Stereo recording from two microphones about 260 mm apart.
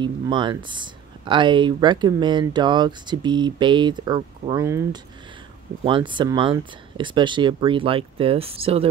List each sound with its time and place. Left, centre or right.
0.0 s speech: centre
5.9 s speech: centre